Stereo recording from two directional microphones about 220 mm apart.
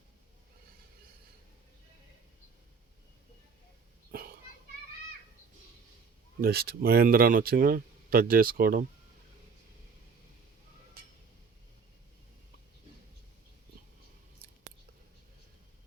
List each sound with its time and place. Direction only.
4.1 s children playing: 45° right (ahead or behind)
6.4 s speech: 45° right (ahead or behind)